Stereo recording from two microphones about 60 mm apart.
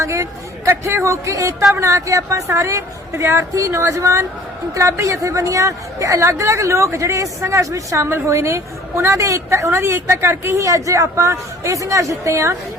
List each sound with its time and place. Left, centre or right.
0.0 s a woman's voice: right
8.1 s a woman's voice: right
10.6 s a woman's voice: right